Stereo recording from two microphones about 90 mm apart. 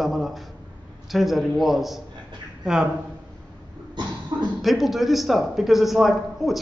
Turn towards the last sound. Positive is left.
turn(degrees=0)  # may be behind; listen again after turning